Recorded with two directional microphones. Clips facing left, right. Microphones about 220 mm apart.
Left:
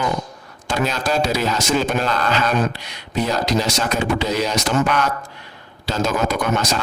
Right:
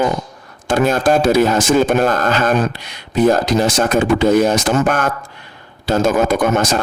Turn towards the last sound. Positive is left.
turn(degrees=-50)  # may be behind; listen again after turning